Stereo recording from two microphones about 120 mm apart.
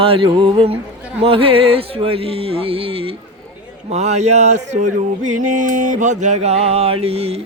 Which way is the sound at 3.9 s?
65° right (ahead or behind).